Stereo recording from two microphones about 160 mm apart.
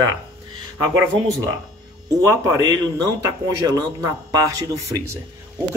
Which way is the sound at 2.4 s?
20° right (ahead or behind).